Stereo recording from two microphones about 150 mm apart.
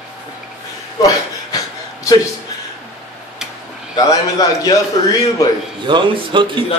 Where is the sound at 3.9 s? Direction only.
25° left (ahead or behind).